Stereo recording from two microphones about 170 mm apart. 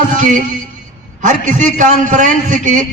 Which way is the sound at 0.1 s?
50° right (ahead or behind).